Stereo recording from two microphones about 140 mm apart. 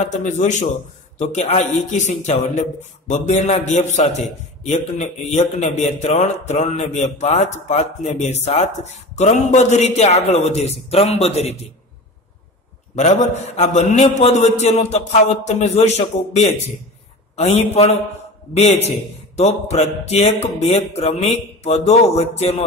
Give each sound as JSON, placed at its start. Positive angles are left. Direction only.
{"t": 0.1, "sound": "a man's voice", "side_deg": 60}
{"t": 12.9, "sound": "a man's voice", "side_deg": 55}